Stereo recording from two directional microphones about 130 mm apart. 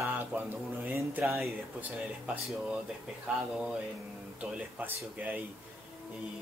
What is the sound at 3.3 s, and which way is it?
Speech, 10° right (ahead or behind).